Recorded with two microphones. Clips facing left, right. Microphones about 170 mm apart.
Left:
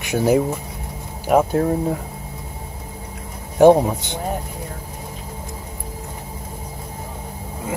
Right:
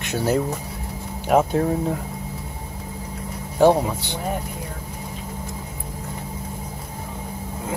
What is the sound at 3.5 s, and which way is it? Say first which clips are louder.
Speech: left 5 dB; 15° left (ahead or behind).